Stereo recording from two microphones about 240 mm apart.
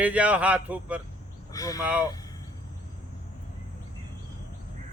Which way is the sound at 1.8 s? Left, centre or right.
Centre.